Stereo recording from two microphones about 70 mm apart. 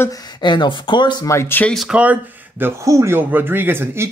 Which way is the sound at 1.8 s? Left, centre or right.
Centre.